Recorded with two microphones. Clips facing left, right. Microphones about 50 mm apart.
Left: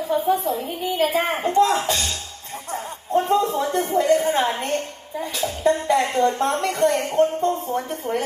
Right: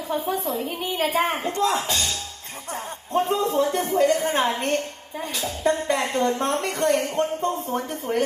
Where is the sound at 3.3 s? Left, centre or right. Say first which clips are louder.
Left 2 dB; left.